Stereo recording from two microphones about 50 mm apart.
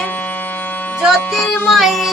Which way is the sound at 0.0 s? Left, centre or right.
Left.